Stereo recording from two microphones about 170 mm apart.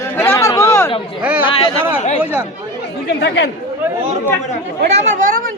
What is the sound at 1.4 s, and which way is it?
Speech, 30° left (ahead or behind).